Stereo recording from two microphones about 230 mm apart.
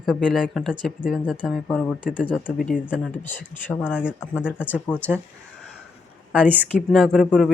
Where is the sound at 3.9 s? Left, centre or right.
Centre.